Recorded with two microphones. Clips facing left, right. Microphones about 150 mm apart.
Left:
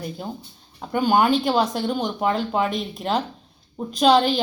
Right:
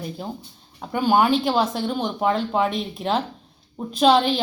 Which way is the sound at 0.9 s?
Centre (ahead or behind).